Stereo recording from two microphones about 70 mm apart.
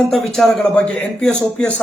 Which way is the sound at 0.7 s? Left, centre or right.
Centre.